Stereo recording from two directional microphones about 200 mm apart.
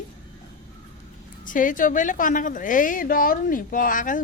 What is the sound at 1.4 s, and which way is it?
A woman's voice, 40° left (ahead or behind).